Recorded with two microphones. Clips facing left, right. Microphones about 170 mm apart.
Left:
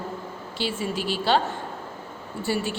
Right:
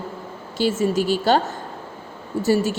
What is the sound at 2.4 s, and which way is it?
Speech, 45° right (ahead or behind).